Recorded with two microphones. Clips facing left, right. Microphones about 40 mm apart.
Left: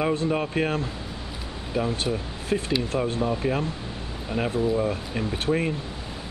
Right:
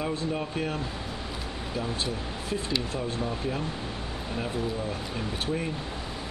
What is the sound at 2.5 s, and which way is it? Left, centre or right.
Speech, left.